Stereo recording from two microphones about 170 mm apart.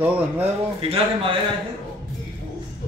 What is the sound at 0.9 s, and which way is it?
Speech, 30° right (ahead or behind).